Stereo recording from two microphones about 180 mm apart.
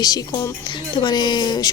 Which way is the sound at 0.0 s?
20° left (ahead or behind).